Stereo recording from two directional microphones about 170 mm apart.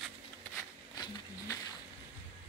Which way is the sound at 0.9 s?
20° left (ahead or behind).